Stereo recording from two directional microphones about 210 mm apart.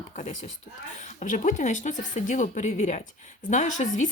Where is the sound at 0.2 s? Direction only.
30° left (ahead or behind).